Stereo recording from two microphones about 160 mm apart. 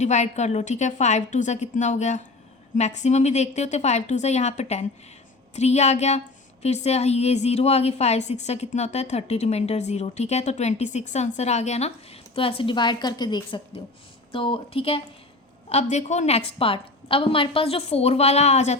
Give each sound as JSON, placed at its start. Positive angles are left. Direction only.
{"t": 0.0, "sound": "a woman's voice", "side_deg": 45}